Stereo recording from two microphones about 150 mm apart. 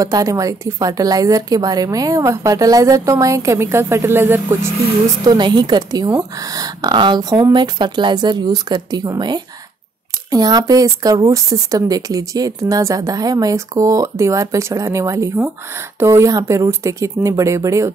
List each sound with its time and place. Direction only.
0.0 s speech: 20° right (ahead or behind)
5.2 s speech: 30° right (ahead or behind)